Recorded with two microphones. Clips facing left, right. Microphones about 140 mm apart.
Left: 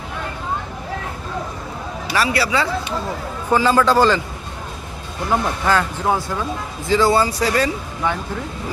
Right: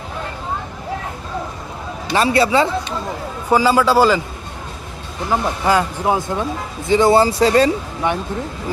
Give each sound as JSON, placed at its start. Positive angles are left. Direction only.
{"t": 2.1, "sound": "speech", "side_deg": -25}
{"t": 3.5, "sound": "speech", "side_deg": -10}
{"t": 5.3, "sound": "speech", "side_deg": -10}